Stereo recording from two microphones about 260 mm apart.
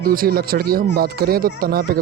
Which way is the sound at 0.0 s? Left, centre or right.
Right.